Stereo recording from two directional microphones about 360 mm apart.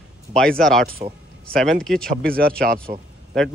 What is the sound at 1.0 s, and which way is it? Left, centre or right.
Speech, centre.